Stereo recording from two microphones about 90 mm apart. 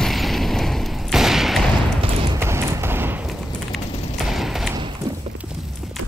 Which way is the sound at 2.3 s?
30° right (ahead or behind).